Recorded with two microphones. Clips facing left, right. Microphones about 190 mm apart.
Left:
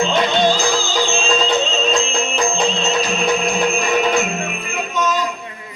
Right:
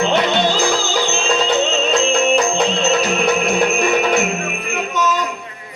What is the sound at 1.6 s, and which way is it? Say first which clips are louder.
Music: right 2 dB; 65° right (ahead or behind).